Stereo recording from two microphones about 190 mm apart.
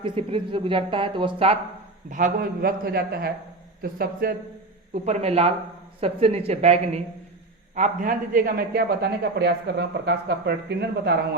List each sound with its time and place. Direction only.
0.0 s speech: 25° right (ahead or behind)
2.0 s a man's voice: 45° right (ahead or behind)
5.0 s a woman's voice: 35° right (ahead or behind); by 11.3 s 60° right (ahead or behind)